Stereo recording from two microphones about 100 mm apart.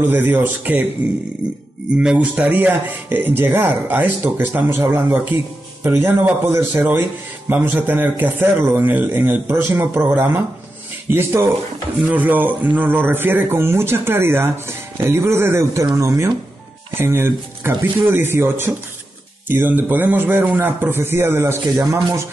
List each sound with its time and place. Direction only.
0.0 s a man's voice: 20° right (ahead or behind)
2.0 s a man's voice: 10° right (ahead or behind)